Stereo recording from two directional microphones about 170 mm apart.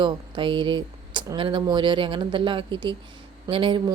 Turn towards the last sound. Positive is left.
turn(degrees=-30)  # may be behind; listen again after turning